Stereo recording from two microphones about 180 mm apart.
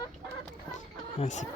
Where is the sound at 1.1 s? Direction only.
40° left (ahead or behind).